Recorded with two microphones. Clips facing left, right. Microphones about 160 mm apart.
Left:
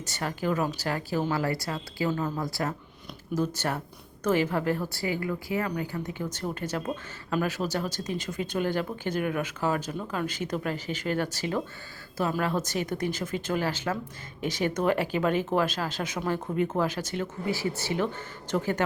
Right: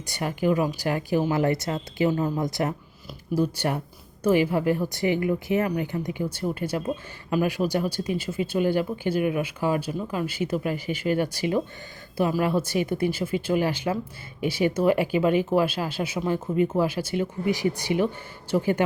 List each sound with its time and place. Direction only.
0.0 s a woman's voice: 15° right (ahead or behind)